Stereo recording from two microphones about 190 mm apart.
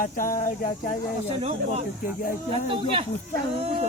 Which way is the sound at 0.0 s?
45° left (ahead or behind).